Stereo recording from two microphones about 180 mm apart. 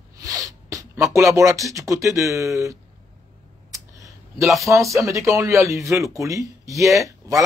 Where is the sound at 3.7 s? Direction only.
20° right (ahead or behind).